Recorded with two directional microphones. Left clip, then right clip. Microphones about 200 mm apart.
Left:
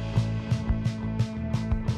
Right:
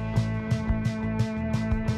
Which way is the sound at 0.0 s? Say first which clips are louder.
Right 2 dB; centre (ahead or behind).